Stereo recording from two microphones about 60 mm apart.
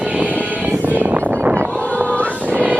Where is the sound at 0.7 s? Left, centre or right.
Right.